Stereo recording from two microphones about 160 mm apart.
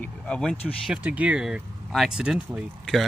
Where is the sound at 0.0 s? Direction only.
5° left (ahead or behind).